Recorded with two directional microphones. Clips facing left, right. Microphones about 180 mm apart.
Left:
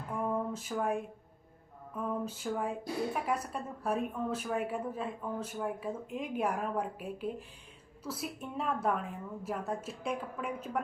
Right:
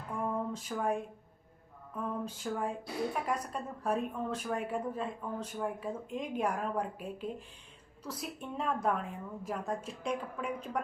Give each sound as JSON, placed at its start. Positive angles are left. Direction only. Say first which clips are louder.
{"t": 0.5, "sound": "a woman's voice", "louder": "even", "side_deg": 5}
{"t": 2.2, "sound": "a woman's voice", "louder": "left 1 dB", "side_deg": 5}